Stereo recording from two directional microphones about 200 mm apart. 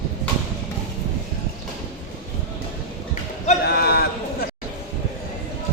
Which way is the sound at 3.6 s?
50° left (ahead or behind).